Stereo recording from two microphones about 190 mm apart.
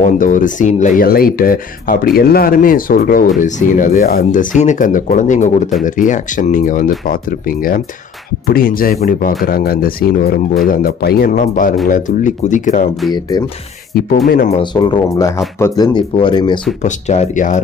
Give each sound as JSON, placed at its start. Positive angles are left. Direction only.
{"t": 0.0, "sound": "speech", "side_deg": 45}
{"t": 13.3, "sound": "speech", "side_deg": 20}
{"t": 14.2, "sound": "speech", "side_deg": 50}
{"t": 14.5, "sound": "speech", "side_deg": 25}
{"t": 16.8, "sound": "speech", "side_deg": 40}